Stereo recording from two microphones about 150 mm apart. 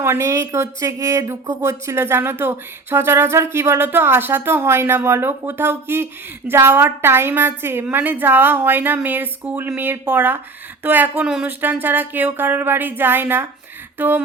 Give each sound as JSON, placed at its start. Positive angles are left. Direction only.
{"t": 0.0, "sound": "speech", "side_deg": -20}